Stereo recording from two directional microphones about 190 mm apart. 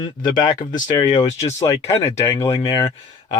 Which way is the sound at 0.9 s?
25° left (ahead or behind).